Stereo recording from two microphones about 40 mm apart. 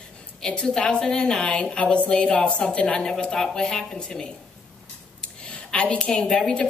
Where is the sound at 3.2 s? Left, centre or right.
Centre.